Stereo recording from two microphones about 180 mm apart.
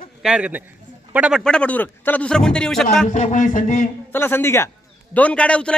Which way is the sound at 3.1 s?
40° left (ahead or behind).